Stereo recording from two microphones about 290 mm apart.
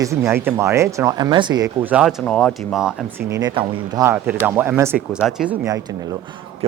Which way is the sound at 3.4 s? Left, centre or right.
Centre.